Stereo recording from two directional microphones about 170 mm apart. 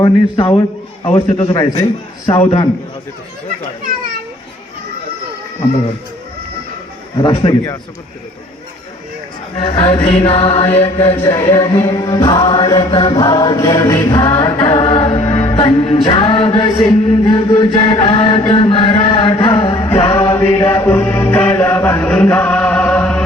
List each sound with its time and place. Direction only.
0.0 s music: 25° left (ahead or behind)
1.1 s chant: 30° left (ahead or behind)
7.2 s music: 25° left (ahead or behind)
9.6 s chant: 35° left (ahead or behind)
10.8 s music: 30° left (ahead or behind)
11.2 s music: 15° left (ahead or behind)
12.4 s chant: 25° left (ahead or behind)
20.5 s music: 15° left (ahead or behind)